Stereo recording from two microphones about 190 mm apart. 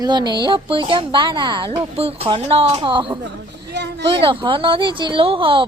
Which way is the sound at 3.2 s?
65° right (ahead or behind).